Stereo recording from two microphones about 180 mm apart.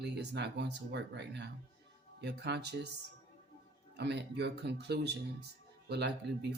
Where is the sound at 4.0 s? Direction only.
70° right (ahead or behind).